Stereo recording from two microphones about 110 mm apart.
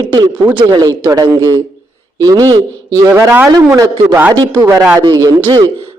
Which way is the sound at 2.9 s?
25° right (ahead or behind).